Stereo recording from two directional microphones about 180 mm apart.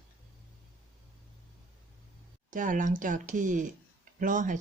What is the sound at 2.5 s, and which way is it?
Speech, 45° right (ahead or behind).